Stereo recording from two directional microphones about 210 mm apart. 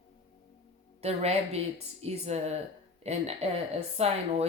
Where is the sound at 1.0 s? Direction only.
30° right (ahead or behind).